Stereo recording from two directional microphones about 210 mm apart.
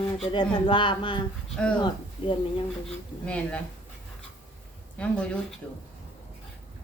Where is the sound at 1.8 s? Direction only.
20° left (ahead or behind).